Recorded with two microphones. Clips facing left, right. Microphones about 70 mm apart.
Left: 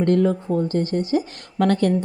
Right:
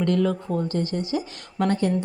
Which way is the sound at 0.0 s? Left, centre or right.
Left.